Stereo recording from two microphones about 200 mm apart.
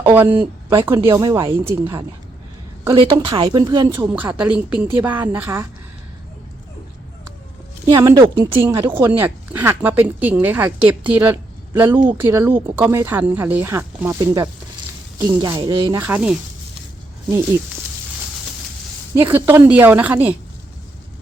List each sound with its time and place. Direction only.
0.0 s speech: 10° right (ahead or behind)
0.8 s speech: 25° right (ahead or behind)
3.0 s speech: 25° right (ahead or behind)
3.9 s speech: 10° right (ahead or behind)
7.9 s speech: 15° right (ahead or behind)
16.0 s speech: 5° right (ahead or behind)
19.2 s speech: 10° right (ahead or behind)